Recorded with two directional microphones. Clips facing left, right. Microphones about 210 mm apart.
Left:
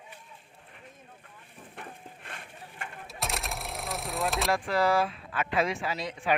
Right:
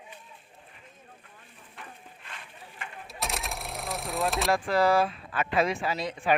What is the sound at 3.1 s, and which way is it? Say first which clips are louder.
Sewing machine: right 1 dB; centre (ahead or behind).